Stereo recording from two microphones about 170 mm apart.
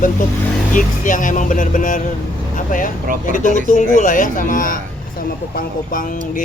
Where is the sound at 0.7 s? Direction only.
50° left (ahead or behind).